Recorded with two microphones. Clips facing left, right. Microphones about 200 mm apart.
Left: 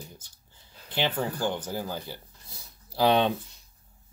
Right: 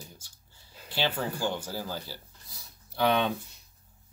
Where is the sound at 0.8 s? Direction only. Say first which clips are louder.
Left 2 dB; 20° left (ahead or behind).